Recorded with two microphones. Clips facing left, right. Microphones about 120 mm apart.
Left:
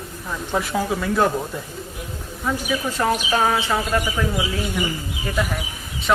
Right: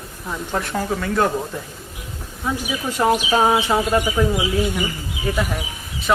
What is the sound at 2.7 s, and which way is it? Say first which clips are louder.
Speech: right 3 dB; 15° right (ahead or behind).